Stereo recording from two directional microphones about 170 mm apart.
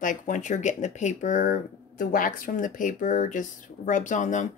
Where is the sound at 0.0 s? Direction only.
50° left (ahead or behind).